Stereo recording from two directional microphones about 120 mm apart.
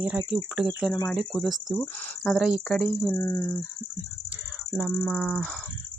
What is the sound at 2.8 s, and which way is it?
Speech, 10° left (ahead or behind).